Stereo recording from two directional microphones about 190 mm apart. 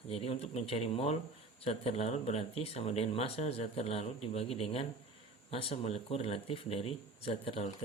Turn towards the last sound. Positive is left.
turn(degrees=30)  # may be behind; listen again after turning